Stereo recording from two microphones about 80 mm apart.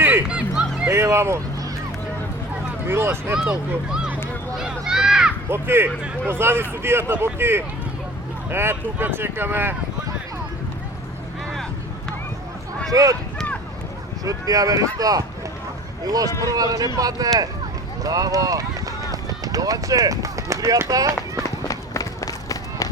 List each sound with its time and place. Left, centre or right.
0.0 s music: right
0.3 s music: centre
0.9 s speech: right
2.8 s speech: right
3.3 s speech: centre
4.5 s a sound: centre
5.5 s speech: right
12.9 s speech: right
14.3 s speech: right
21.7 s run: left